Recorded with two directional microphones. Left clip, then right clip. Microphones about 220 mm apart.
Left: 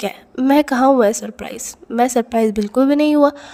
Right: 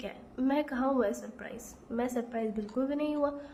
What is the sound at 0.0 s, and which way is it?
A woman's voice, 45° left (ahead or behind).